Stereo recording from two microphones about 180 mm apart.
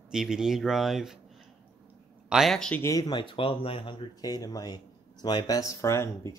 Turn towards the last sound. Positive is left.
turn(degrees=15)  # may be behind; listen again after turning